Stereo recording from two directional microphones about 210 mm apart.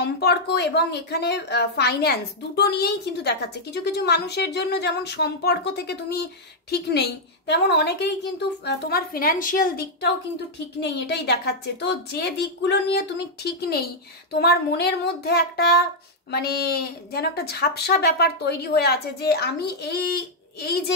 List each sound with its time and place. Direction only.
0.0 s a woman's voice: 50° left (ahead or behind)
10.8 s a woman's voice: 55° left (ahead or behind)